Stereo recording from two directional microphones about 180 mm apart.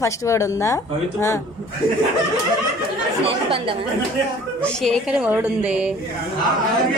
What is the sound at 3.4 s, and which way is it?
Speech, 30° right (ahead or behind).